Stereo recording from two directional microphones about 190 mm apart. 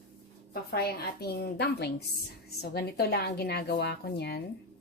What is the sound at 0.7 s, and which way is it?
A woman's voice, 55° left (ahead or behind).